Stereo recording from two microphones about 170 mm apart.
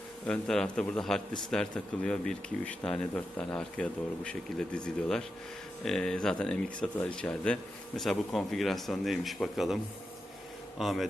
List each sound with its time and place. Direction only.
0.3 s speech: 5° left (ahead or behind)